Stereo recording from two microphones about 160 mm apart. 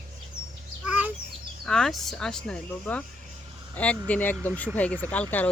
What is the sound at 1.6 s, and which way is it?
Speech, 5° left (ahead or behind).